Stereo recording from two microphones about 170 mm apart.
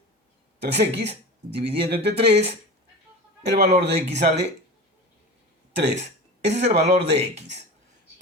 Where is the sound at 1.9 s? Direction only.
75° right (ahead or behind).